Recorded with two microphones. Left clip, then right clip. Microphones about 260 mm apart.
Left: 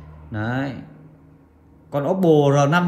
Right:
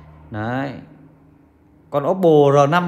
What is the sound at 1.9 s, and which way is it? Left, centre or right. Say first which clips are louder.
Speech: right 3 dB; right.